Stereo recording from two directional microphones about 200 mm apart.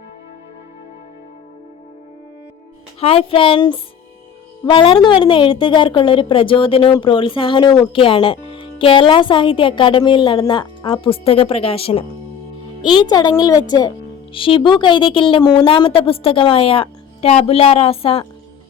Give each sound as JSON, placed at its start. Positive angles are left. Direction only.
{"t": 3.0, "sound": "a woman's voice", "side_deg": 30}